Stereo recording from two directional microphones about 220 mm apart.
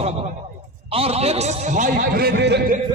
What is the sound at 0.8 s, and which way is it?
A man's voice, 25° right (ahead or behind).